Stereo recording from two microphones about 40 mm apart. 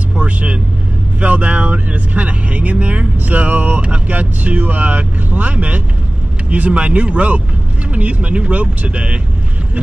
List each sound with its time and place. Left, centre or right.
0.1 s vehicle: right
1.2 s speech: right